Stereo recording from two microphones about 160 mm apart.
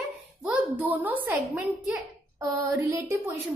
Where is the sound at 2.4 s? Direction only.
20° right (ahead or behind).